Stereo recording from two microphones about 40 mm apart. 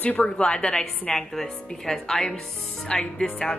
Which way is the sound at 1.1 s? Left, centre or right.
Centre.